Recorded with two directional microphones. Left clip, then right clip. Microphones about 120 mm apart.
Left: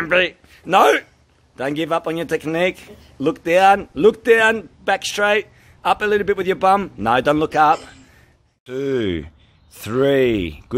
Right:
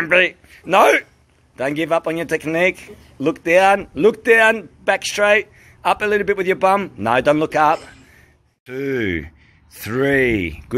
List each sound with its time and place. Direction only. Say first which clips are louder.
0.0 s speech: right 2 dB; 25° left (ahead or behind)
8.6 s speech: left 1 dB; 45° left (ahead or behind)